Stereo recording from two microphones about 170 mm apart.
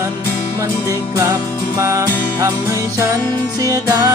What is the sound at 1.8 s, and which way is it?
Music, 20° right (ahead or behind).